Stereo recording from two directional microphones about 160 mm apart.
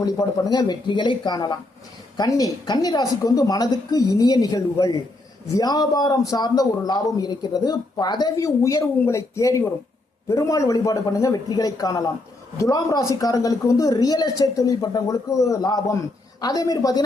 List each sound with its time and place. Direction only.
0.5 s a man's voice: 25° left (ahead or behind)